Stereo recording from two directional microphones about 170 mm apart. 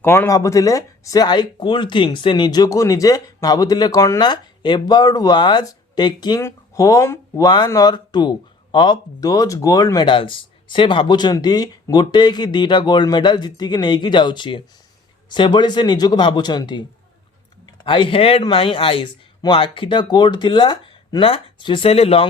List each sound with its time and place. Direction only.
0.0 s speech: 15° left (ahead or behind)
17.8 s speech: 30° left (ahead or behind)